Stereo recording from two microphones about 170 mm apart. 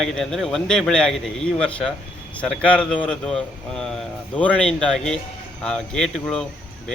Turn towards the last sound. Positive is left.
turn(degrees=5)  # may be behind; listen again after turning